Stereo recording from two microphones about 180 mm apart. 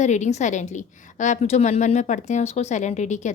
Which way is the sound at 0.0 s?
40° left (ahead or behind).